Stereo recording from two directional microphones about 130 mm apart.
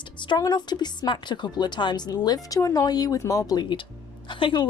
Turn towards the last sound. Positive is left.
turn(degrees=40)  # may be behind; listen again after turning